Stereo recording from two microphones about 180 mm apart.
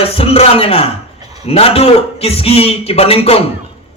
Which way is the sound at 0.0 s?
30° left (ahead or behind).